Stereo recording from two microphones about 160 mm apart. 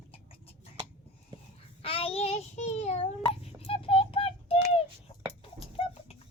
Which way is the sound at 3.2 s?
35° left (ahead or behind).